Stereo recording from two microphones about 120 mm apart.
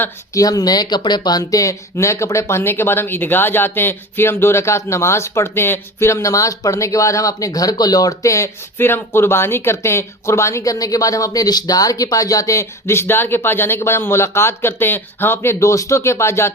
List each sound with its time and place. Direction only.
0.3 s speech: 30° left (ahead or behind)